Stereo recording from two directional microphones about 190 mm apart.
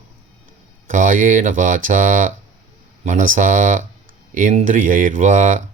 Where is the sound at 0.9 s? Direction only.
45° right (ahead or behind).